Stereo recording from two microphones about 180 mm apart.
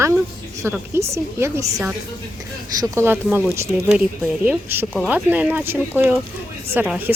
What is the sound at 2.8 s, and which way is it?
Speech, 15° right (ahead or behind).